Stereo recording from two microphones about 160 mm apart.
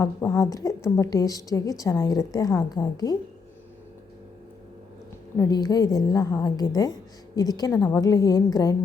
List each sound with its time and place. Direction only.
0.0 s a woman's voice: 20° left (ahead or behind)
5.4 s a woman's voice: 25° left (ahead or behind)